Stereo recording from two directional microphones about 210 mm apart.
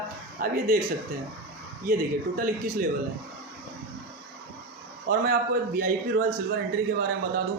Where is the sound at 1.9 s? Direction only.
45° right (ahead or behind).